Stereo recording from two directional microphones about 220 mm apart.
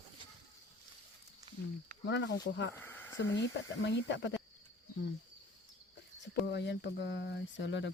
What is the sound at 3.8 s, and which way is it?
Speech, 50° left (ahead or behind).